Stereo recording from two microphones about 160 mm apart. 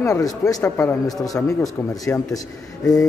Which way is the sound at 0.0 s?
20° left (ahead or behind).